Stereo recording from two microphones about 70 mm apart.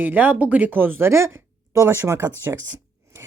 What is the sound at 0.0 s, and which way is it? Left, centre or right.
Speech, right.